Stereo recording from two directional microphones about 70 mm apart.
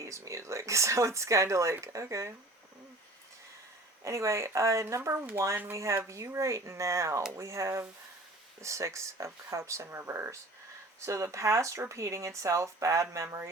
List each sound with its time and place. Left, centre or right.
0.0 s speech: right
4.0 s speech: right
11.0 s speech: right